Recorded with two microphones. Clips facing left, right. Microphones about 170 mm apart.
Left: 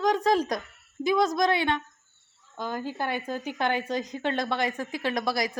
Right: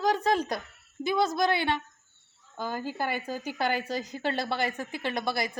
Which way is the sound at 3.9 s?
35° right (ahead or behind).